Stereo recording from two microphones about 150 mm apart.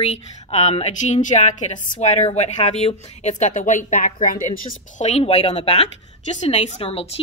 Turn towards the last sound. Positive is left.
turn(degrees=40)  # may be behind; listen again after turning